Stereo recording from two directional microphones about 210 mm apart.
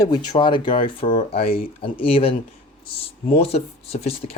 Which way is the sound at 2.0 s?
25° left (ahead or behind).